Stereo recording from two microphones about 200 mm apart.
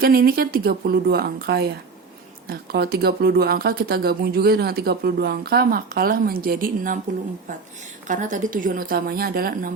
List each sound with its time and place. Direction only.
0.0 s speech: 50° right (ahead or behind)
8.0 s speech: 40° right (ahead or behind)